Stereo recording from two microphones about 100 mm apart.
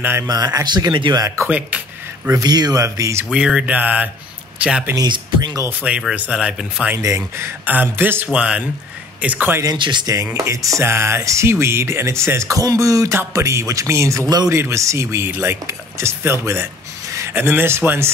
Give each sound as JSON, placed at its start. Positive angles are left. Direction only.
{"t": 0.2, "sound": "speech", "side_deg": -40}
{"t": 1.2, "sound": "speech", "side_deg": -30}
{"t": 2.4, "sound": "speech", "side_deg": -40}
{"t": 3.3, "sound": "speech", "side_deg": -5}
{"t": 4.9, "sound": "speech", "side_deg": -45}
{"t": 5.7, "sound": "speech", "side_deg": -15}
{"t": 7.0, "sound": "speech", "side_deg": -30}
{"t": 9.8, "sound": "speech", "side_deg": -50}
{"t": 10.3, "sound": "speech", "side_deg": -35}